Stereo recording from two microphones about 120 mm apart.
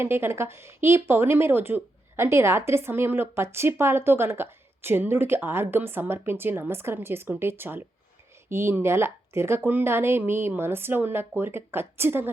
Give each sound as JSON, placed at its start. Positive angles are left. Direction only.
{"t": 0.0, "sound": "speech", "side_deg": -20}